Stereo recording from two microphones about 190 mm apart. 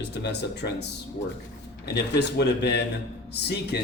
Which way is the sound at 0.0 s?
65° left (ahead or behind).